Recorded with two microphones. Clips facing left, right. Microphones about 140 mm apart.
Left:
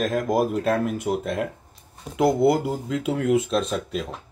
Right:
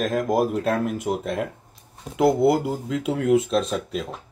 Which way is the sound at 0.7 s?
45° left (ahead or behind).